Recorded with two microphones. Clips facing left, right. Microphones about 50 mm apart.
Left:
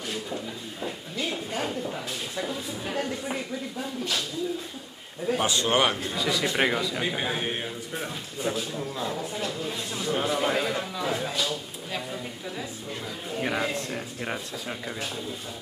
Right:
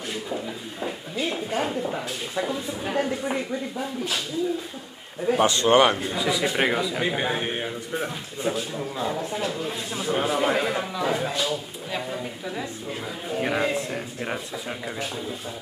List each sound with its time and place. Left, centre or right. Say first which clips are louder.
0.1 s speech: right 3 dB; centre
5.2 s speech: right 5 dB; centre